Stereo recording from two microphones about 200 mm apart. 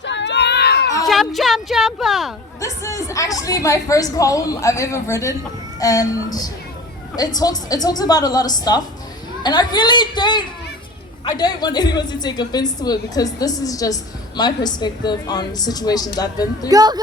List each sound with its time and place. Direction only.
0.0 s a sound: 60° left (ahead or behind)
1.0 s speech: centre (ahead or behind)
2.6 s a woman's voice: 15° left (ahead or behind)
16.6 s speech: 20° right (ahead or behind)